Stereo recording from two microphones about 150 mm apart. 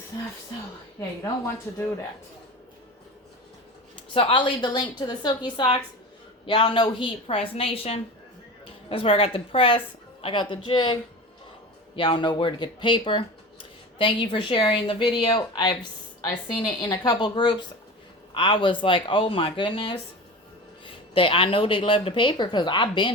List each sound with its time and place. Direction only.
4.1 s a woman's voice: 35° left (ahead or behind)
11.9 s a woman's voice: 35° left (ahead or behind)